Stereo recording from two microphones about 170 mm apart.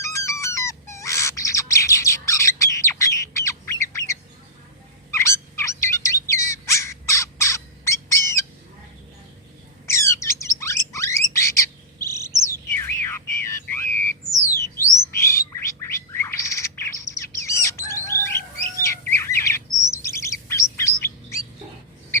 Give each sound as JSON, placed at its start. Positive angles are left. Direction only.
{"t": 0.0, "sound": "bird", "side_deg": 15}
{"t": 9.8, "sound": "bird", "side_deg": 15}
{"t": 12.7, "sound": "a sound", "side_deg": 15}
{"t": 14.5, "sound": "bird", "side_deg": 15}
{"t": 20.7, "sound": "chirp", "side_deg": 15}